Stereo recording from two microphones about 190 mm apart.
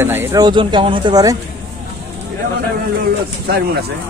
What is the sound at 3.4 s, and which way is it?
Speech, 55° right (ahead or behind).